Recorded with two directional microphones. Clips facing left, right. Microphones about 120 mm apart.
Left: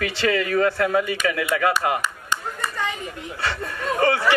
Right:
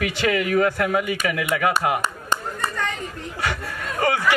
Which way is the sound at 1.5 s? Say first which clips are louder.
Right 1 dB; 50° right (ahead or behind).